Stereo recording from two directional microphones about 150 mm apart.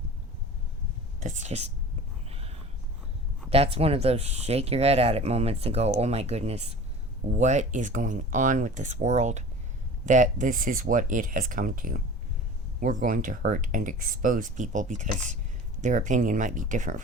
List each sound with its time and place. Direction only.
1.2 s speech: 50° right (ahead or behind)
2.3 s a sound: 40° right (ahead or behind)
3.5 s speech: 40° right (ahead or behind); by 16.9 s 60° right (ahead or behind)